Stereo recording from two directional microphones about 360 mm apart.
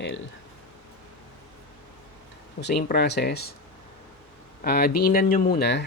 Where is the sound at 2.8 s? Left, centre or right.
Left.